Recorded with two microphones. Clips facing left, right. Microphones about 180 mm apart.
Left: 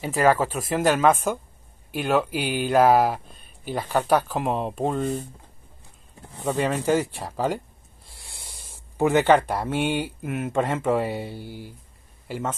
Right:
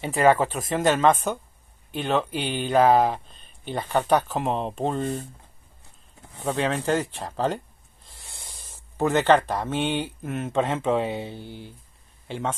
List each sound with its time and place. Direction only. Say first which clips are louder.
0.1 s speech: right 1 dB; centre (ahead or behind)
6.4 s speech: left 1 dB; 10° left (ahead or behind)
8.2 s snort: even; 15° right (ahead or behind)
8.5 s speech: left 2 dB; 10° left (ahead or behind)